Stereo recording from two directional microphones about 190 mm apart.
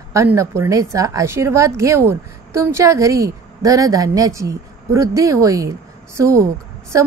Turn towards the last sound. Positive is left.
turn(degrees=-15)  # may be behind; listen again after turning